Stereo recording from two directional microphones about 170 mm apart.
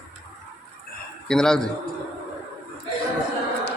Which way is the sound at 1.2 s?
5° left (ahead or behind).